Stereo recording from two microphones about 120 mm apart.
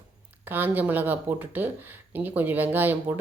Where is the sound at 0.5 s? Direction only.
15° right (ahead or behind).